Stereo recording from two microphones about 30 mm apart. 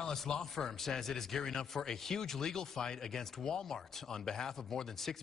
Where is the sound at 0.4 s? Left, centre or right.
Centre.